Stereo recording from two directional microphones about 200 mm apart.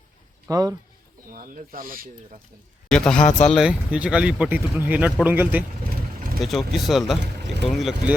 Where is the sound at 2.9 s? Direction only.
5° left (ahead or behind).